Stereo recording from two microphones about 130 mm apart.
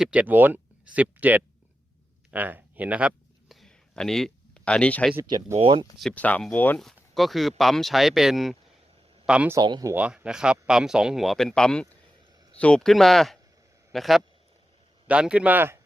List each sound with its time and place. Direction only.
0.0 s speech: 10° right (ahead or behind)
2.3 s speech: 15° right (ahead or behind)
3.5 s a sound: 5° left (ahead or behind)
5.5 s speech: 40° right (ahead or behind)
6.0 s speech: 10° left (ahead or behind)
6.7 s speech: centre (ahead or behind)
9.6 s speech: 35° right (ahead or behind)
9.9 s speech: 10° right (ahead or behind)